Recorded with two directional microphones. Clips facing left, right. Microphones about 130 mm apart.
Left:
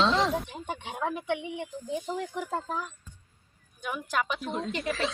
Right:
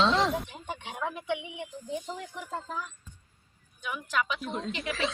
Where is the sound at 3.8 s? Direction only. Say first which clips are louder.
Left 1 dB; 45° left (ahead or behind).